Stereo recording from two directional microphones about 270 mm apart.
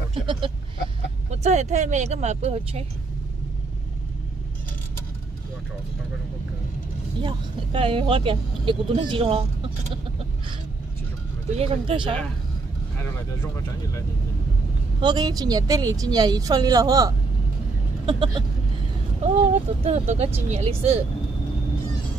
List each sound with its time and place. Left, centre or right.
0.1 s speech: centre
7.2 s speech: centre
11.5 s speech: right
12.9 s speech: centre
15.0 s speech: centre